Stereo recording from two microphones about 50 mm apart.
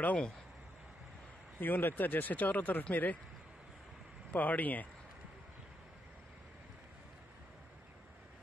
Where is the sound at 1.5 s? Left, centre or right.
Left.